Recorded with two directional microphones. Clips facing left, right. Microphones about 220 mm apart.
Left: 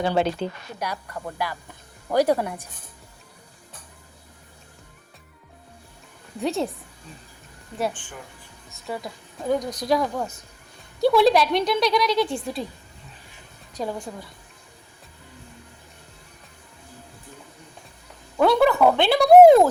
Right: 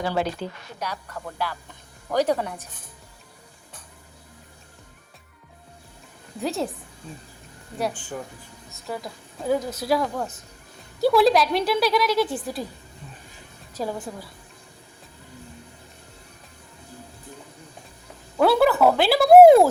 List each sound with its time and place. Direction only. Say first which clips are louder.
0.0 s a woman's voice: left 3 dB; 25° left (ahead or behind)
0.8 s speech: left 1 dB; 10° left (ahead or behind)
6.4 s speech: left 2 dB; centre (ahead or behind)
8.7 s speech: left 1 dB; centre (ahead or behind)
13.7 s speech: even; 5° right (ahead or behind)
18.3 s speech: even; 5° right (ahead or behind)